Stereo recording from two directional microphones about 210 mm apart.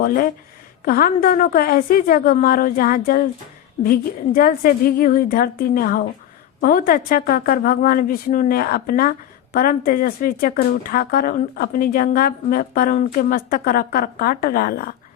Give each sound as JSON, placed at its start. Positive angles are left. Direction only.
{"t": 0.0, "sound": "a woman's voice", "side_deg": 45}